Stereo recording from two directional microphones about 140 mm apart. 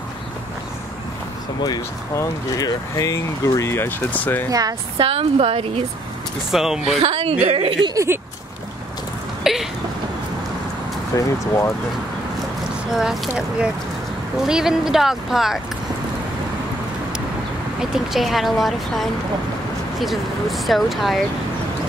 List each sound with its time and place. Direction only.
1.6 s speech: 25° left (ahead or behind)
4.5 s speech: 25° right (ahead or behind)
4.9 s a woman's voice: 40° right (ahead or behind)
6.5 s speech: 5° right (ahead or behind)
7.0 s a woman's voice: 45° right (ahead or behind)
7.9 s speech: 20° right (ahead or behind)
9.4 s rain: centre (ahead or behind)
11.1 s speech: 25° left (ahead or behind)
12.9 s speech: centre (ahead or behind)
17.9 s speech: centre (ahead or behind)